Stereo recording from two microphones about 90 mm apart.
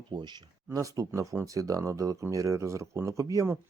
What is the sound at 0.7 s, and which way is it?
Speech, 40° right (ahead or behind).